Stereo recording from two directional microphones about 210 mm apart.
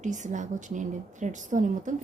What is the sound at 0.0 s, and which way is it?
A woman's voice, 35° right (ahead or behind).